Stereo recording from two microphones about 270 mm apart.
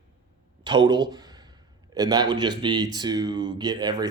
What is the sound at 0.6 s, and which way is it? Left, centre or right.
A man's voice, centre.